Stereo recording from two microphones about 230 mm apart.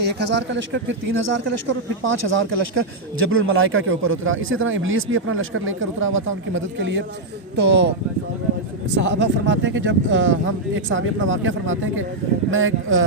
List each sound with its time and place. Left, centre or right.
0.0 s a man's voice: right
9.0 s a man's voice: right